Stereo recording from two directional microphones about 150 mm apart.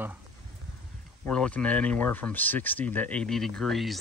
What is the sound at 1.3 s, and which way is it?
Speech, 5° left (ahead or behind).